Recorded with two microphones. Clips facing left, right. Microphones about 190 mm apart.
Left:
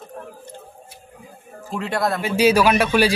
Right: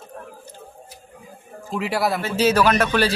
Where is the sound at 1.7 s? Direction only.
5° right (ahead or behind).